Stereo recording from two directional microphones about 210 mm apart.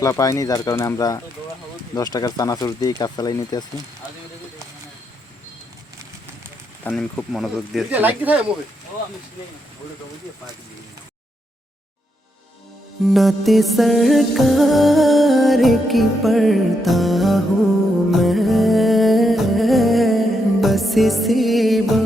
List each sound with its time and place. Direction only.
0.0 s speech: 15° left (ahead or behind)
6.8 s music: 5° left (ahead or behind)
13.1 s music: centre (ahead or behind)